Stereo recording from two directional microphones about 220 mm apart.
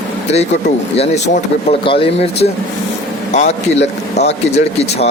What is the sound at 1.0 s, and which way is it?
Speech, 30° left (ahead or behind).